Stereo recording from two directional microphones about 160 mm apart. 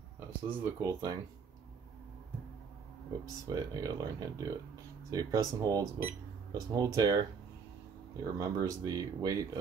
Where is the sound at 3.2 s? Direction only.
20° right (ahead or behind).